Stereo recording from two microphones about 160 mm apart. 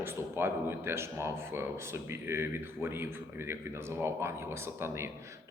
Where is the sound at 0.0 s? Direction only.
15° right (ahead or behind).